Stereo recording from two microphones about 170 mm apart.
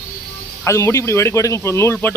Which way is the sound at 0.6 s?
15° left (ahead or behind).